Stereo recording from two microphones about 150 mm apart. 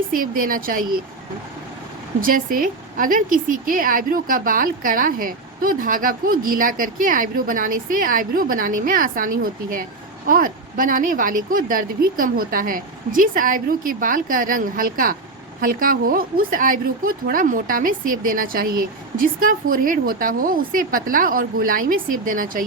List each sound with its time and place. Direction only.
0.1 s a woman's voice: 70° right (ahead or behind)
2.2 s a woman's voice: 65° right (ahead or behind)